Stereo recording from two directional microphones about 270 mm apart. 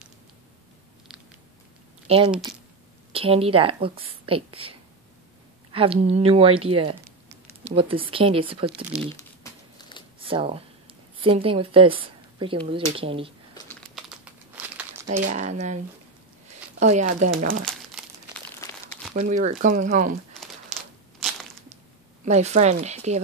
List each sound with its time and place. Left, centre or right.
2.0 s speech: centre
9.1 s crumpling: centre
10.2 s speech: centre
13.9 s crumpling: centre
15.2 s speech: right
16.8 s speech: right
18.0 s crumpling: centre
19.1 s speech: right
22.2 s speech: right